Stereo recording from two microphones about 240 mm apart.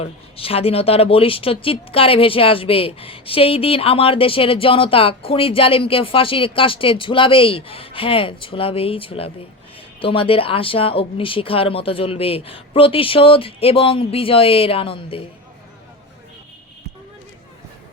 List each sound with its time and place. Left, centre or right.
0.0 s speech: left